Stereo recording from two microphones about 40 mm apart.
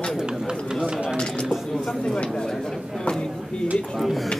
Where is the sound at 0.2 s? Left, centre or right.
Centre.